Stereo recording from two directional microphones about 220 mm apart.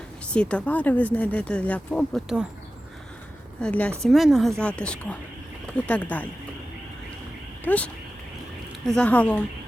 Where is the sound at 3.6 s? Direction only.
5° left (ahead or behind).